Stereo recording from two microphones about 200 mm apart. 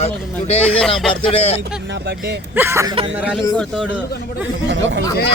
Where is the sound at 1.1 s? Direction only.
25° left (ahead or behind).